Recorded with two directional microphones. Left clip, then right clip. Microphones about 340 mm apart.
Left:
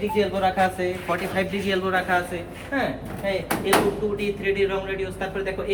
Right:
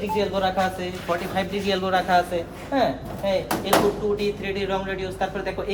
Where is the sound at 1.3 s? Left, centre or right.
Centre.